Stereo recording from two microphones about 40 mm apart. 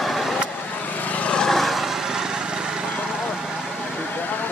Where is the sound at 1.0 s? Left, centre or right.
Left.